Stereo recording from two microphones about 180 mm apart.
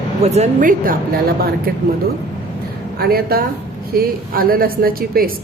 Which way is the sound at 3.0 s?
55° right (ahead or behind).